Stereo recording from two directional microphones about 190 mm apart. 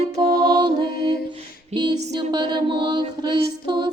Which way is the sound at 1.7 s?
25° right (ahead or behind).